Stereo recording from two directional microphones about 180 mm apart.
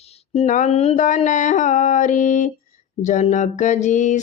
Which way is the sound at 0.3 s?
40° left (ahead or behind).